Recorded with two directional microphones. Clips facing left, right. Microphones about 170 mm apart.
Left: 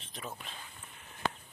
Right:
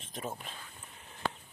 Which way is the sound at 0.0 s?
45° right (ahead or behind).